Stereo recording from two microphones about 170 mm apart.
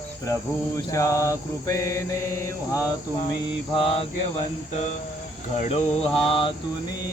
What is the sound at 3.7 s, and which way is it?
Mantra, 30° left (ahead or behind).